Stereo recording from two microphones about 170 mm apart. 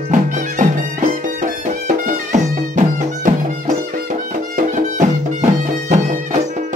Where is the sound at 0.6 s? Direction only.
50° right (ahead or behind).